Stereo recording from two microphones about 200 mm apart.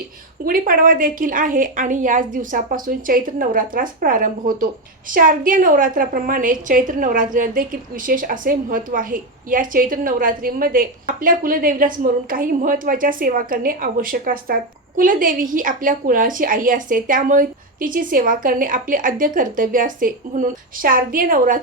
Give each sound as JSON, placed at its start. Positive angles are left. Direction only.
{"t": 0.4, "sound": "a woman's voice", "side_deg": -45}